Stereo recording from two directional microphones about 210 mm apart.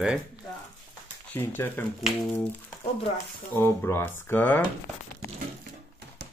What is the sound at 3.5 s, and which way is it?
Speech, 10° left (ahead or behind).